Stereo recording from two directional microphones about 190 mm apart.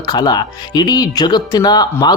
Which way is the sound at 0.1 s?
20° left (ahead or behind).